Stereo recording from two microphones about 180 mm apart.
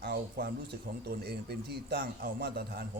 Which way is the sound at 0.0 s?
60° right (ahead or behind).